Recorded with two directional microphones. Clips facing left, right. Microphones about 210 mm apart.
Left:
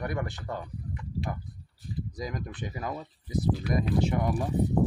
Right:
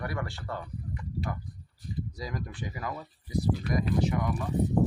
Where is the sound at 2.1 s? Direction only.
20° left (ahead or behind).